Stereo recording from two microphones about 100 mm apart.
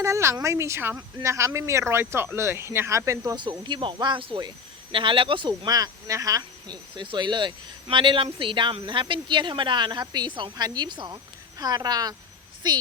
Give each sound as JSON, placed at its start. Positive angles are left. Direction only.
{"t": 0.0, "sound": "a woman's voice", "side_deg": -30}
{"t": 3.3, "sound": "speech", "side_deg": -50}
{"t": 5.6, "sound": "speech", "side_deg": -40}
{"t": 6.9, "sound": "speech", "side_deg": -55}